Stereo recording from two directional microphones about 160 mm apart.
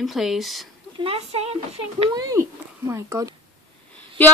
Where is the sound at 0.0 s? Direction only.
Centre (ahead or behind).